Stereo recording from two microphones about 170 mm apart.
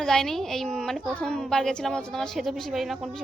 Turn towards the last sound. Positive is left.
turn(degrees=0)  # may be behind; listen again after turning